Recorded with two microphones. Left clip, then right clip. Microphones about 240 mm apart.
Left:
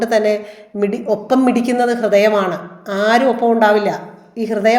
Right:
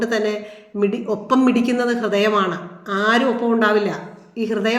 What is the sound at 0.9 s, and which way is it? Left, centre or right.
A woman's voice, centre.